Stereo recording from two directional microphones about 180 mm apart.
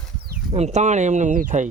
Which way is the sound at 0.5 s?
40° right (ahead or behind).